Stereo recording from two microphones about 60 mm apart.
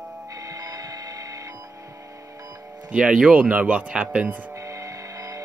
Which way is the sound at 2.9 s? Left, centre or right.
Centre.